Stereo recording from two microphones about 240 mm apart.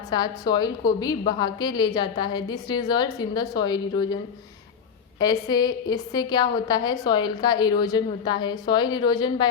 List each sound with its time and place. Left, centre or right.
0.1 s a woman's voice: centre
5.2 s a woman's voice: centre